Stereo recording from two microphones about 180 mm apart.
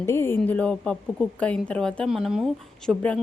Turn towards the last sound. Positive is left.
turn(degrees=5)  # may be behind; listen again after turning